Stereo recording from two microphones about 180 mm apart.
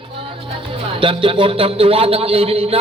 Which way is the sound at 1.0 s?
30° right (ahead or behind).